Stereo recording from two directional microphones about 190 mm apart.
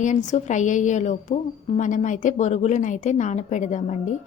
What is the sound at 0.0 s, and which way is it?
A woman's voice, 40° left (ahead or behind).